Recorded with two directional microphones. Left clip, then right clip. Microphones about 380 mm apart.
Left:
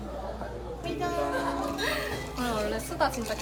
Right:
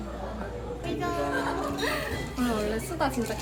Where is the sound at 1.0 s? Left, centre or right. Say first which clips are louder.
Even; left.